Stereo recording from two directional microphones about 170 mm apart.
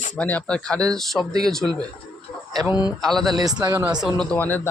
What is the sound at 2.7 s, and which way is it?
Speech, 25° left (ahead or behind).